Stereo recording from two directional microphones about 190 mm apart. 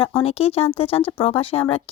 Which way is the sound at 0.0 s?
30° left (ahead or behind).